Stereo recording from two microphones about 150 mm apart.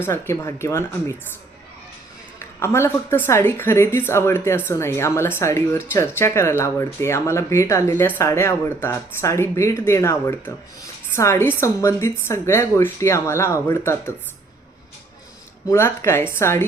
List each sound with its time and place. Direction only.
0.0 s a woman's voice: 15° left (ahead or behind)
2.4 s a woman's voice: 15° left (ahead or behind)
15.6 s a woman's voice: 15° left (ahead or behind)